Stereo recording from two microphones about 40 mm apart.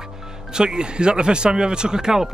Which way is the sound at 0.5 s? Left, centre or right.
Right.